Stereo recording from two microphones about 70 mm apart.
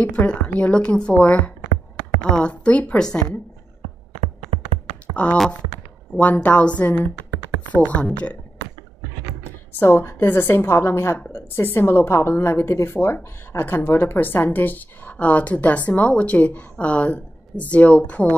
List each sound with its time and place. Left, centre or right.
0.0 s a woman's voice: centre
5.1 s speech: centre
9.8 s a woman's voice: left; by 18.3 s centre